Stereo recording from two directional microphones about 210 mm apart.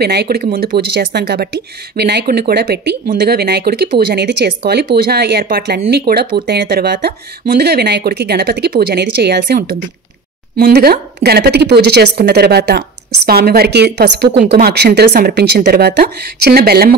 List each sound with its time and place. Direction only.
0.0 s speech: 50° right (ahead or behind)